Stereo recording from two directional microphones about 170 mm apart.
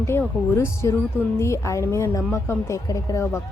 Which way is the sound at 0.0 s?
15° left (ahead or behind).